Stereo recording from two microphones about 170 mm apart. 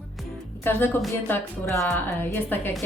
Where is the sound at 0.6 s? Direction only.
10° left (ahead or behind).